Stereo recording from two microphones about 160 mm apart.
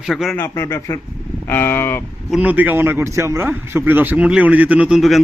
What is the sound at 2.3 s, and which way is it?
A man's voice, 10° right (ahead or behind).